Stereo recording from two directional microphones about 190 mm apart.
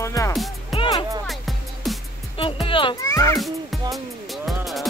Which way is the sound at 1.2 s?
Centre (ahead or behind).